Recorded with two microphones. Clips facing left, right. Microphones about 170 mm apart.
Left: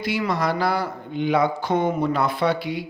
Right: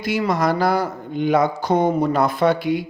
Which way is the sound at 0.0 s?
45° right (ahead or behind).